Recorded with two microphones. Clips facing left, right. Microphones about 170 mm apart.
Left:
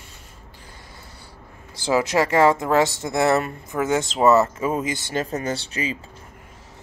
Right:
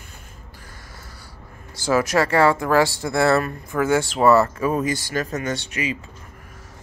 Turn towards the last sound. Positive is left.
turn(degrees=30)  # may be behind; listen again after turning